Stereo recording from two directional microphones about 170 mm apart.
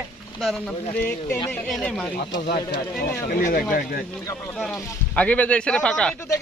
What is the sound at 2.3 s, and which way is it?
Speech, 60° left (ahead or behind).